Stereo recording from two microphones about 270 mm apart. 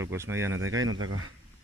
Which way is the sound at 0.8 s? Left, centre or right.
Right.